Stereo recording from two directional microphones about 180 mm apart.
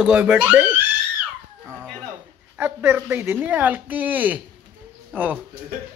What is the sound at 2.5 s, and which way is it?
Speech, 10° right (ahead or behind).